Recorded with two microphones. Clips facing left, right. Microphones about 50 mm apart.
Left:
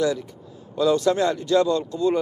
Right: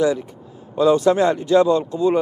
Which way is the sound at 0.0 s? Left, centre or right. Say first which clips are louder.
Right 4 dB; centre.